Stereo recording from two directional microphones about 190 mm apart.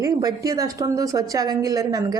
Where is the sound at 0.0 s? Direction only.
20° right (ahead or behind).